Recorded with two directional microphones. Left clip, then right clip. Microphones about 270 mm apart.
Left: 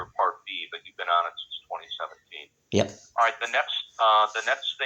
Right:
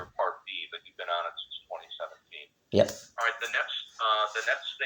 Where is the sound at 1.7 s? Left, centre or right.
Centre.